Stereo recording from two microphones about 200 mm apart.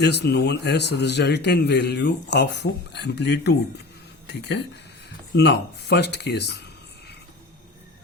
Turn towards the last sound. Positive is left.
turn(degrees=55)  # may be behind; listen again after turning